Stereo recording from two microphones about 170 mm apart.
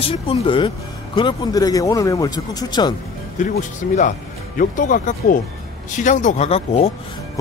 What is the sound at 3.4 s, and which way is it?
Speech, 45° left (ahead or behind).